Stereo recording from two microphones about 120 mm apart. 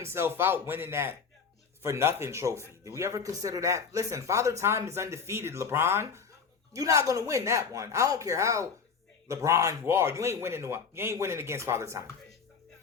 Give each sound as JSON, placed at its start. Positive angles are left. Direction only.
{"t": 0.0, "sound": "speech", "side_deg": -20}